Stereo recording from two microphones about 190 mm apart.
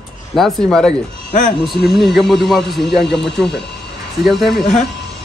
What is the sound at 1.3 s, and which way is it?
Speech, 45° left (ahead or behind).